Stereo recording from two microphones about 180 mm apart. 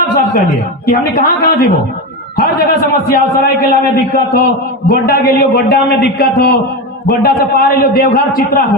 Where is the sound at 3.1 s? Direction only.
55° left (ahead or behind).